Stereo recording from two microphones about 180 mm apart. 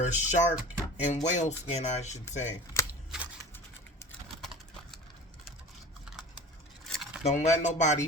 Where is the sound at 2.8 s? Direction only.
15° left (ahead or behind).